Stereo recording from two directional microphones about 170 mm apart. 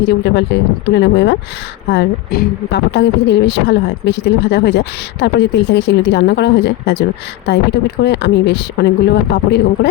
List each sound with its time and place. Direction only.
0.0 s a woman's voice: 90° left
1.9 s a woman's voice: 75° left (ahead or behind)
9.3 s a man's voice: 75° left (ahead or behind)